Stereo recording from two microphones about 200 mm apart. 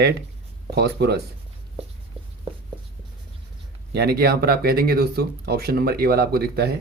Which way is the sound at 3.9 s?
50° right (ahead or behind).